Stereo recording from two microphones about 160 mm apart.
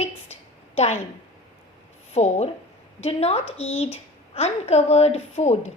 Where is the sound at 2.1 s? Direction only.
40° left (ahead or behind).